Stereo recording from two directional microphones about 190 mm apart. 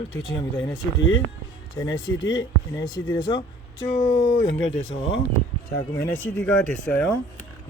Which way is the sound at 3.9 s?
40° left (ahead or behind).